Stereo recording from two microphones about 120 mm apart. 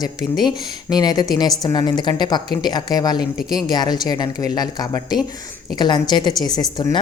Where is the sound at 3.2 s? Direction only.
5° right (ahead or behind).